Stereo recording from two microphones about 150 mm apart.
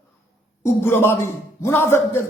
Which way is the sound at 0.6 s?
15° left (ahead or behind).